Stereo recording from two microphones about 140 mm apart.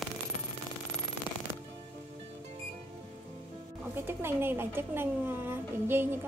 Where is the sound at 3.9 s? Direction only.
15° right (ahead or behind).